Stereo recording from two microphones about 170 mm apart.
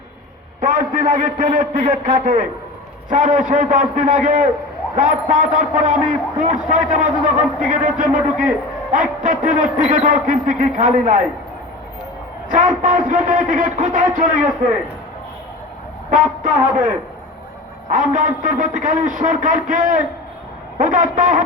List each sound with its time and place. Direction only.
0.8 s a man's voice: 50° right (ahead or behind)
12.5 s a man's voice: 50° right (ahead or behind)
16.0 s a man's voice: 50° right (ahead or behind)
17.9 s a man's voice: 50° right (ahead or behind)